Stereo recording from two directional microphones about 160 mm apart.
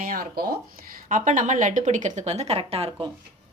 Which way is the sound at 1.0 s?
55° right (ahead or behind).